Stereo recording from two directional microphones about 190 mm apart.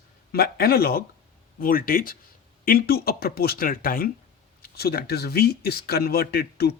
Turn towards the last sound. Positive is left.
turn(degrees=55)  # may be behind; listen again after turning